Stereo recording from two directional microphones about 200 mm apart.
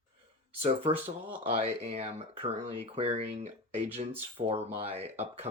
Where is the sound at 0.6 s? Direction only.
30° right (ahead or behind).